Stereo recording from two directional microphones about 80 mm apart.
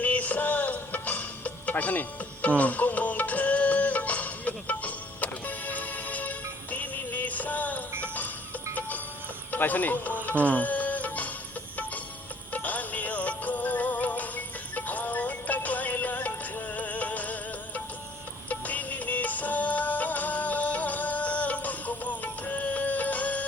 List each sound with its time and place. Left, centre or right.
0.0 s music: centre
9.5 s speech: left
10.2 s music: centre
12.5 s music: centre
18.4 s music: centre